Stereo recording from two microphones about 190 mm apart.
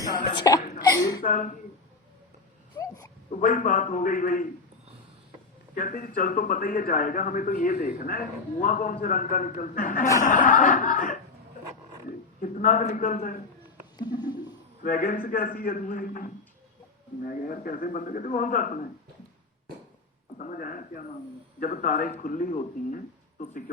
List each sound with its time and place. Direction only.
0.0 s hiccup: 20° left (ahead or behind)
0.8 s a sound: 15° left (ahead or behind)
1.2 s a man's voice: 45° left (ahead or behind)
2.8 s a sound: 15° left (ahead or behind)
3.3 s a man's voice: 45° left (ahead or behind)
5.7 s a man's voice: 45° left (ahead or behind)
12.4 s a man's voice: 45° left (ahead or behind)
14.0 s a sound: 20° left (ahead or behind)
14.8 s a man's voice: 45° left (ahead or behind)
20.4 s a man's voice: 45° left (ahead or behind)